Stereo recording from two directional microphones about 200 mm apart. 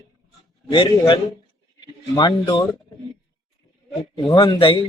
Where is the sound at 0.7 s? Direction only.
25° left (ahead or behind).